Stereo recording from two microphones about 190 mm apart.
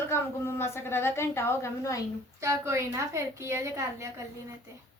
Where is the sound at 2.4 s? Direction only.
15° right (ahead or behind).